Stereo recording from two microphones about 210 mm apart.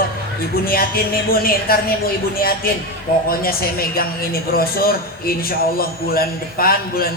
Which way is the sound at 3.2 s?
45° left (ahead or behind).